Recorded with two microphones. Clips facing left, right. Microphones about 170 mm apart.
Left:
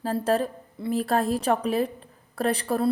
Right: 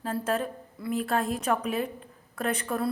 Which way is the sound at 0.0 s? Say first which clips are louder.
Left 5 dB; 35° left (ahead or behind).